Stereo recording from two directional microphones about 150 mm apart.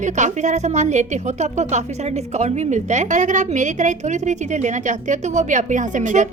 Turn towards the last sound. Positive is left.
turn(degrees=-55)  # may be behind; listen again after turning